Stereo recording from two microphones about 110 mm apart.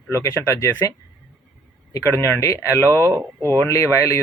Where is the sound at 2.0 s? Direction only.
20° left (ahead or behind).